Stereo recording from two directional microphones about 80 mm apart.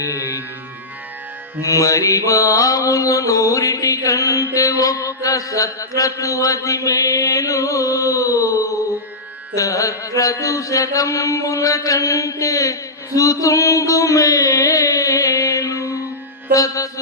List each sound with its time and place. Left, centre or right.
0.1 s music: left
1.6 s mantra: left
13.1 s a sound: left
16.5 s mantra: left